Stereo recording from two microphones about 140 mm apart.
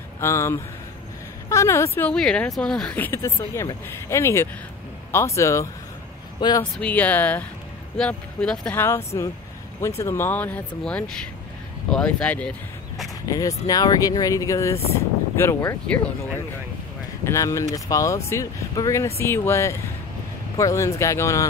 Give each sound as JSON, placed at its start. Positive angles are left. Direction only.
{"t": 0.2, "sound": "speech", "side_deg": 20}
{"t": 6.4, "sound": "speech", "side_deg": 30}
{"t": 6.8, "sound": "speech", "side_deg": 10}
{"t": 8.8, "sound": "speech", "side_deg": 20}
{"t": 13.3, "sound": "speech", "side_deg": 25}
{"t": 17.2, "sound": "speech", "side_deg": 20}